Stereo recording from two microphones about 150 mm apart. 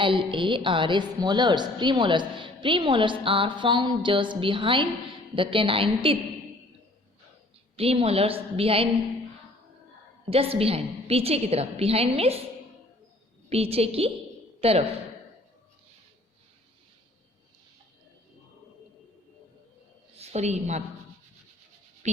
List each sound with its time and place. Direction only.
0.0 s a woman's voice: 35° right (ahead or behind)
7.8 s a woman's voice: 40° right (ahead or behind)
10.2 s a woman's voice: 40° right (ahead or behind)
13.5 s a woman's voice: 40° right (ahead or behind)
20.1 s a woman's voice: 45° right (ahead or behind)
22.0 s speech: 50° right (ahead or behind)